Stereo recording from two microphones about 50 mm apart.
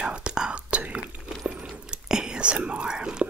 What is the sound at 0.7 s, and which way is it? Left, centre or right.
Whispering, right.